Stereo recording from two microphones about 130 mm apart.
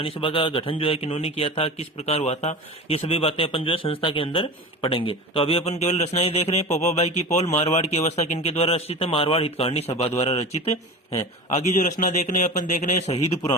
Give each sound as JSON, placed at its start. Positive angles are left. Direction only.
{"t": 0.0, "sound": "a man's voice", "side_deg": 45}
{"t": 11.7, "sound": "speech", "side_deg": 80}